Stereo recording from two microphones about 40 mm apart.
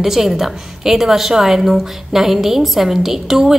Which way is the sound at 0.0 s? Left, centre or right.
Centre.